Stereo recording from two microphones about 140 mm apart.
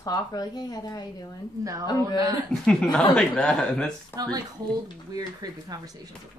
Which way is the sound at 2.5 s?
5° left (ahead or behind).